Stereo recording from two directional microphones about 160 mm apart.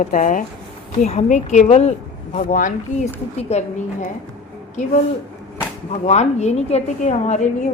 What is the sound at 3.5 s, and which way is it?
Speech, 40° left (ahead or behind).